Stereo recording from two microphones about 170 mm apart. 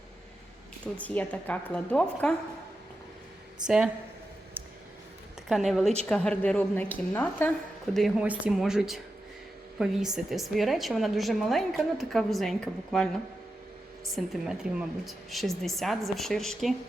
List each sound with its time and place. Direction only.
0.9 s a woman's voice: 10° left (ahead or behind)
3.6 s speech: 25° right (ahead or behind)
5.5 s a woman's voice: centre (ahead or behind)
7.9 s a woman's voice: 5° right (ahead or behind)